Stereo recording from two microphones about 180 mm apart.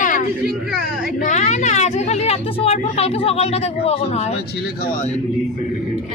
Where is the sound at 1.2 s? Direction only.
40° left (ahead or behind).